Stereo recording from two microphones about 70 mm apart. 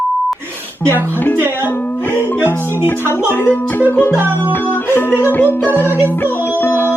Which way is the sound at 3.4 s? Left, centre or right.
Left.